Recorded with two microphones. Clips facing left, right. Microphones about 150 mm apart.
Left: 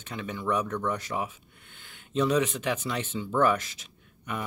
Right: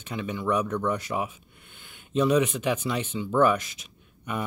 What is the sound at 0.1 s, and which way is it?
Speech, 10° right (ahead or behind).